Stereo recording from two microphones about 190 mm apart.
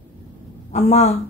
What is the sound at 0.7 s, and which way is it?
Speech, 35° left (ahead or behind).